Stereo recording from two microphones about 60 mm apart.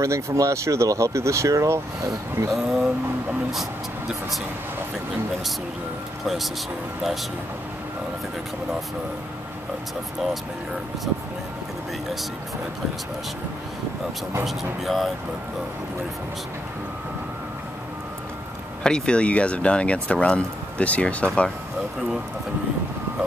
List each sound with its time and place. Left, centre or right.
0.0 s speech: right
2.5 s speech: centre
6.2 s speech: centre
14.4 s speech: centre
18.8 s speech: centre